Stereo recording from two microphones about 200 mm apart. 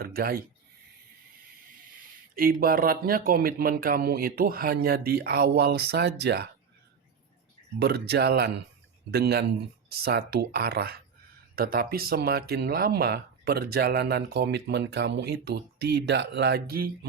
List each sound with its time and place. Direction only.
0.0 s speech: 50° right (ahead or behind)
2.3 s speech: 45° right (ahead or behind)
7.8 s speech: 55° right (ahead or behind)